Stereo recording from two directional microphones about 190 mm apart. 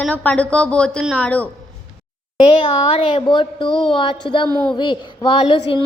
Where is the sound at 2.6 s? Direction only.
30° left (ahead or behind).